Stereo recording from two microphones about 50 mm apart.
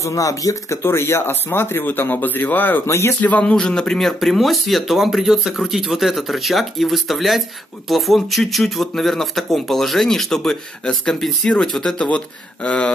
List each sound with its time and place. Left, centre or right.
0.0 s speech: left
0.8 s speech: left
2.9 s speech: left
3.2 s speech: left
3.5 s speech: centre
4.0 s speech: centre
12.6 s speech: left